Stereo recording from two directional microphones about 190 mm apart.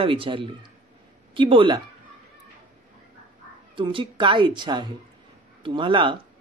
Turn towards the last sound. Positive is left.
turn(degrees=-25)  # may be behind; listen again after turning